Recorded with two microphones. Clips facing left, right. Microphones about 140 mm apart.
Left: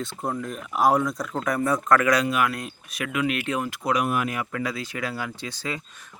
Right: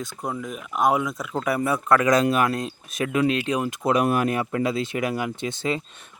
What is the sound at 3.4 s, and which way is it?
Speech, 15° right (ahead or behind).